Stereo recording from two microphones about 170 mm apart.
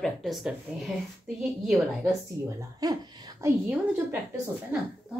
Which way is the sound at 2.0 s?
20° right (ahead or behind).